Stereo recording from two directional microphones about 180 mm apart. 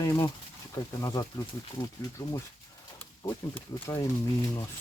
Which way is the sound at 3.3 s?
15° left (ahead or behind).